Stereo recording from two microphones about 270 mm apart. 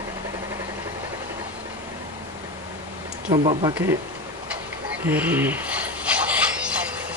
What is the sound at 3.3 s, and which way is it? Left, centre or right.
Speech, centre.